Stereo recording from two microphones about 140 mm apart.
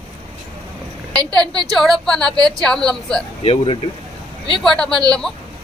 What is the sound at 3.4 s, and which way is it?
Speech, 40° left (ahead or behind).